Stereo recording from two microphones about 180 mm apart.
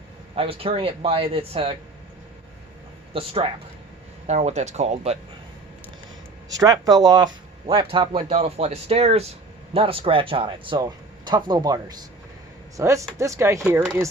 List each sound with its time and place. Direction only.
0.3 s speech: 30° right (ahead or behind)
3.1 s speech: 30° right (ahead or behind)
6.5 s speech: 20° right (ahead or behind)